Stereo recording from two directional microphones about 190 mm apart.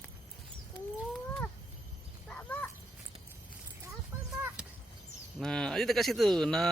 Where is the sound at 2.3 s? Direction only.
5° left (ahead or behind).